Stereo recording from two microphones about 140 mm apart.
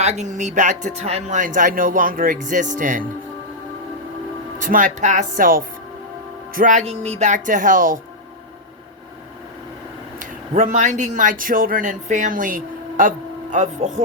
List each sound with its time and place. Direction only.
0.0 s speech: 55° right (ahead or behind)
4.5 s speech: 70° right (ahead or behind)
6.5 s speech: 70° right (ahead or behind)
10.2 s speech: 65° right (ahead or behind)